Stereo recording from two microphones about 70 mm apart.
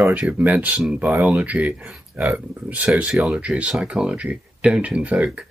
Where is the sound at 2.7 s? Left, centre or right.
Centre.